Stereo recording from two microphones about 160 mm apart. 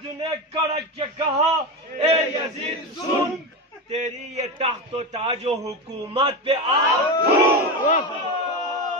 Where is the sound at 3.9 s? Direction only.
45° right (ahead or behind).